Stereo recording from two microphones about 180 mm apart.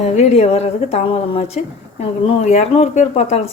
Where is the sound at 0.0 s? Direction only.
35° left (ahead or behind).